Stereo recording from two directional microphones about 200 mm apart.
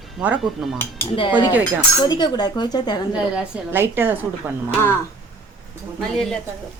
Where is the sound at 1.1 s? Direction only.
25° left (ahead or behind).